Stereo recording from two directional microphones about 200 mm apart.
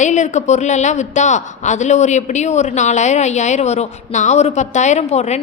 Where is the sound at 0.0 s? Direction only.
35° left (ahead or behind).